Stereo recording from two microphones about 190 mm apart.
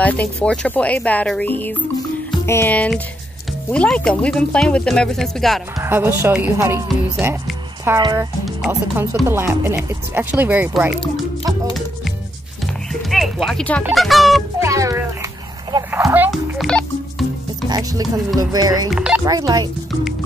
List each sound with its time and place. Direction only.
0.0 s speech: 5° left (ahead or behind)
5.8 s speech: 10° right (ahead or behind)
13.1 s speech: centre (ahead or behind)
14.6 s speech: 15° right (ahead or behind)
15.9 s music: 10° right (ahead or behind)
17.6 s speech: 20° right (ahead or behind)
18.9 s speech: 5° right (ahead or behind)
19.2 s speech: 20° right (ahead or behind)